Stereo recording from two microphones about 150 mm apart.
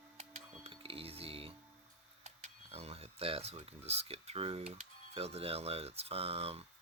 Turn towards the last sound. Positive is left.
turn(degrees=-40)  # may be behind; listen again after turning